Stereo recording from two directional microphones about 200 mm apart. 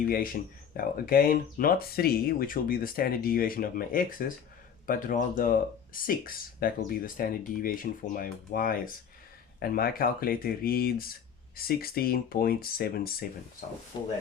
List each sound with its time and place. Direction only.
0.1 s speech: 45° left (ahead or behind)
13.9 s speech: 20° left (ahead or behind)